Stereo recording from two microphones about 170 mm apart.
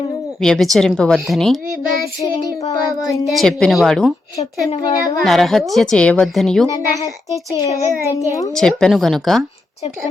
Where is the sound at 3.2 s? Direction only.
Centre (ahead or behind).